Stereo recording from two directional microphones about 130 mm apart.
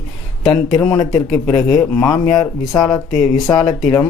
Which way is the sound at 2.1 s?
25° left (ahead or behind).